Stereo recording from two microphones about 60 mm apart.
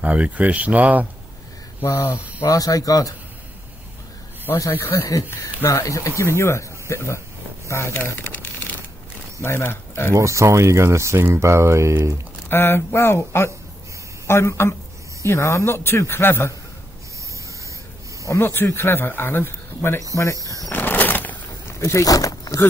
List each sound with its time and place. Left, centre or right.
0.0 s speech: right
1.8 s speech: left
2.4 s speech: left
4.6 s speech: left
5.0 s speech: left
8.3 s shuffling cards: left
9.4 s speech: left
10.1 s speech: right
12.4 s speech: left
18.4 s a man's voice: left
20.7 s a sound: left
21.6 s a sound: left
22.0 s a sound: left